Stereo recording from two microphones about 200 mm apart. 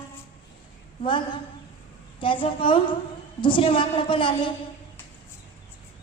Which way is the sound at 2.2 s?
25° left (ahead or behind).